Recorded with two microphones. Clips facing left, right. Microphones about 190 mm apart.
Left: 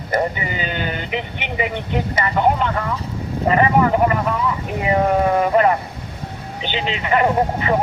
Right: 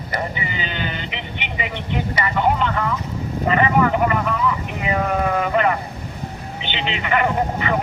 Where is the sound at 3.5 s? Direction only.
35° left (ahead or behind).